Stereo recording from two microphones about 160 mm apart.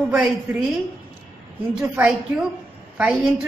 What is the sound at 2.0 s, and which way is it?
A woman's voice, 10° right (ahead or behind).